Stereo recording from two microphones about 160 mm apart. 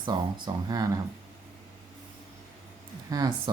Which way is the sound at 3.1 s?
20° right (ahead or behind).